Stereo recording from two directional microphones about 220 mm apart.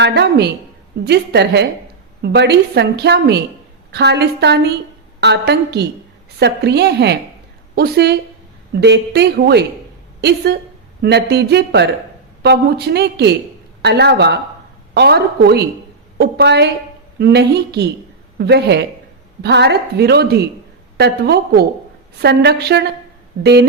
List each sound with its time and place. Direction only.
0.0 s a woman's voice: 50° right (ahead or behind)